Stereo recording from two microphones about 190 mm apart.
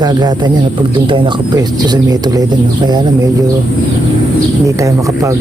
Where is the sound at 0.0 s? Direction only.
20° right (ahead or behind).